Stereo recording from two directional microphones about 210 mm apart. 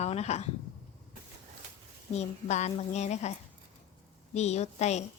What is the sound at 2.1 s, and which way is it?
A woman's voice, 30° left (ahead or behind).